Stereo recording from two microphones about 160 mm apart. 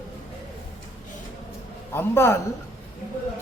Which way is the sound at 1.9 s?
15° left (ahead or behind).